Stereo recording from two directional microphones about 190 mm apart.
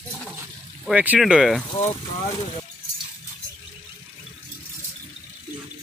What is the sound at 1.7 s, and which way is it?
Speech, 25° left (ahead or behind).